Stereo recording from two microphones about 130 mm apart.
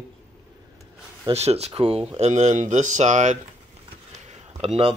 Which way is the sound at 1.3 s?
55° right (ahead or behind).